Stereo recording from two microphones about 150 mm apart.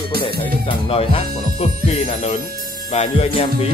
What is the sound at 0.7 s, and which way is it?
Speech, 40° left (ahead or behind).